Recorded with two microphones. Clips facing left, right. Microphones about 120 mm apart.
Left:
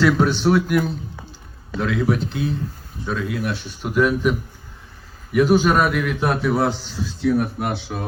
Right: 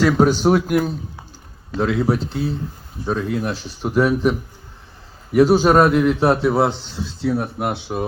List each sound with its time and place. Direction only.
0.2 s a man's voice: 40° right (ahead or behind)
1.8 s a man's voice: 30° right (ahead or behind)